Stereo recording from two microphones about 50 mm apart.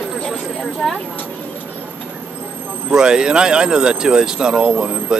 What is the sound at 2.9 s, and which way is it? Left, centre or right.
Speech, centre.